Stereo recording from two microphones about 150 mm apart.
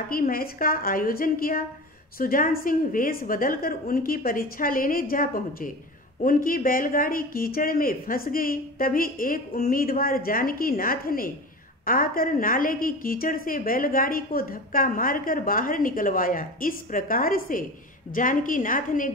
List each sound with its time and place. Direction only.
0.1 s a woman's voice: 75° left (ahead or behind)